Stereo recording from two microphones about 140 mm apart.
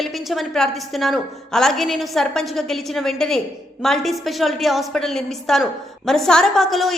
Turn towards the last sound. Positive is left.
turn(degrees=0)  # may be behind; listen again after turning